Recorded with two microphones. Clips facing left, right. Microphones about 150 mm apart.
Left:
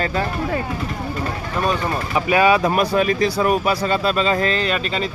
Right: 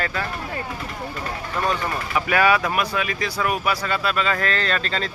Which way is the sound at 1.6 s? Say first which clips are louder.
Left 3 dB; 20° left (ahead or behind).